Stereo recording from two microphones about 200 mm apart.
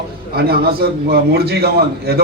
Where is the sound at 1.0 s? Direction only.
50° right (ahead or behind).